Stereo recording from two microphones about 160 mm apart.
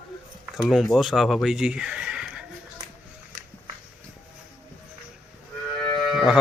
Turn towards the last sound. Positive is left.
turn(degrees=0)  # may be behind; listen again after turning